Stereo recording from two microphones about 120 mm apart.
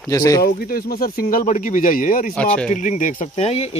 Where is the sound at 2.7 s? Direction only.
90° left; by 3.7 s 60° left (ahead or behind).